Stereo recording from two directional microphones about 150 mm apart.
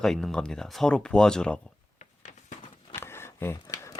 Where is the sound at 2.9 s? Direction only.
15° left (ahead or behind).